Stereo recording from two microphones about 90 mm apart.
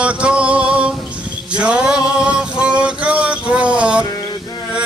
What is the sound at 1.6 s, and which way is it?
Male singing, 10° right (ahead or behind).